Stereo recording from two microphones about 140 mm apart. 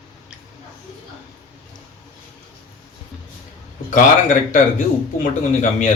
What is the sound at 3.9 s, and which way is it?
Speech, 65° left (ahead or behind).